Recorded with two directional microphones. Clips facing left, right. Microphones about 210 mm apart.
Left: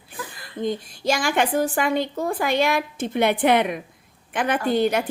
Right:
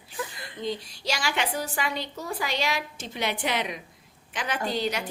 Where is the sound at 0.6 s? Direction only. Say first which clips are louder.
Left 6 dB; 50° left (ahead or behind).